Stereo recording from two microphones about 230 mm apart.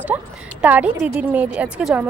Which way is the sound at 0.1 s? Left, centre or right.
Centre.